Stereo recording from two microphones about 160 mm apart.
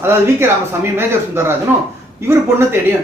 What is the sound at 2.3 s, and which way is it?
Speech, 15° right (ahead or behind).